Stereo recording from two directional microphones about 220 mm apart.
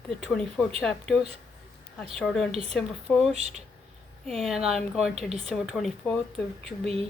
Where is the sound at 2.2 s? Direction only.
Centre (ahead or behind).